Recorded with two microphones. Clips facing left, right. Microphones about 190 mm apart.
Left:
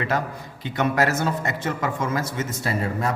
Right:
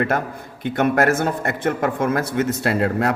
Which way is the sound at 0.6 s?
55° right (ahead or behind).